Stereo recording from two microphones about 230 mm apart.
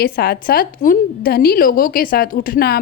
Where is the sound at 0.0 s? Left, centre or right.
Left.